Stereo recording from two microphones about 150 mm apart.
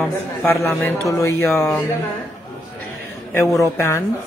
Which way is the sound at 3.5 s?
20° left (ahead or behind).